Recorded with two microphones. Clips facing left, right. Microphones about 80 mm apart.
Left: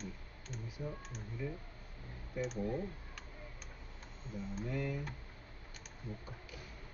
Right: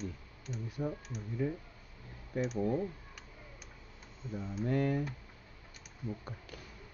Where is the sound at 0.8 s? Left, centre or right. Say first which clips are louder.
Right 7 dB; right.